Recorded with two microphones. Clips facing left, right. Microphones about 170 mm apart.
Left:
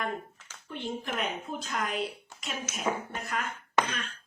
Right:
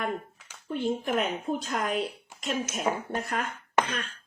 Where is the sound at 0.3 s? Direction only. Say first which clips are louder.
Even; 10° right (ahead or behind).